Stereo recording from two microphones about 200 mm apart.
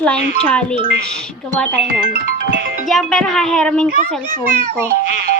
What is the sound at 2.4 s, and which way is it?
Music, 65° right (ahead or behind).